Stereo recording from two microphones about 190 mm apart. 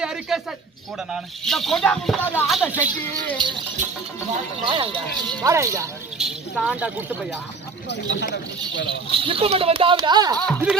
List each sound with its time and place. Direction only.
0.0 s a sound: 5° right (ahead or behind)
1.1 s speech: centre (ahead or behind)
2.5 s speech: 5° right (ahead or behind)
3.4 s speech: 25° right (ahead or behind)
4.6 s speech: 30° right (ahead or behind)
5.4 s speech: 15° right (ahead or behind)
6.1 s speech: 5° right (ahead or behind)
7.9 s speech: 70° left (ahead or behind)
8.9 s speech: 30° right (ahead or behind)
10.3 s speech: 5° left (ahead or behind)